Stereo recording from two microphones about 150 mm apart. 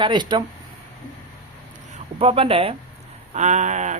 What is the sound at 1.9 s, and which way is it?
Speech, 40° right (ahead or behind).